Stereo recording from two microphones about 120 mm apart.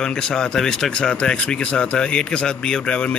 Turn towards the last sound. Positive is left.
turn(degrees=10)  # may be behind; listen again after turning